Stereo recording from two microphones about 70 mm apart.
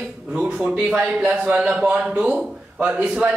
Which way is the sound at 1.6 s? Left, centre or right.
Centre.